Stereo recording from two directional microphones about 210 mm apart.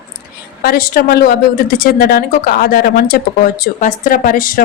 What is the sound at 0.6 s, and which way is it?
A woman's voice, 45° left (ahead or behind).